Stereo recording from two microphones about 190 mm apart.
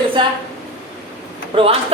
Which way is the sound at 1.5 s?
30° right (ahead or behind).